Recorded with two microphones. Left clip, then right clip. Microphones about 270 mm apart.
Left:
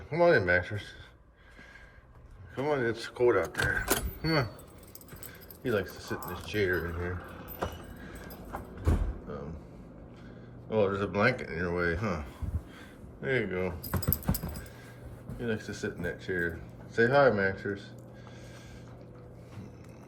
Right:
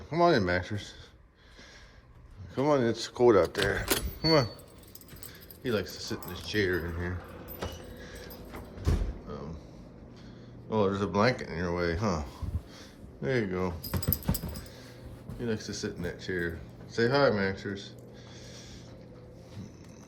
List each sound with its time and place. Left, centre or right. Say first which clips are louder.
0.1 s speech: left 1 dB; centre
2.6 s speech: right 3 dB; centre
3.8 s a sound: right 3 dB; centre
5.6 s speech: left 1 dB; centre
9.3 s vehicle: left 1 dB; centre
10.7 s speech: even; centre
14.0 s speech: even; centre